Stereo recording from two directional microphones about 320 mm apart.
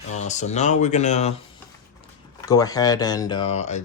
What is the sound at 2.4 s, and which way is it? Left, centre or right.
Speech, centre.